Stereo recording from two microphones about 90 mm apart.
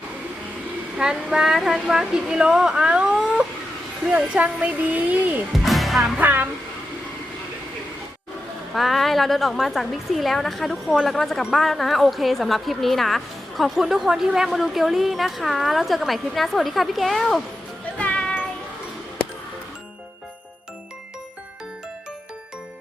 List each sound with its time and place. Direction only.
0.9 s a woman's voice: 5° right (ahead or behind)
5.5 s music: centre (ahead or behind)
6.1 s speech: 20° right (ahead or behind)
8.7 s speech: centre (ahead or behind)
17.9 s music: 15° left (ahead or behind)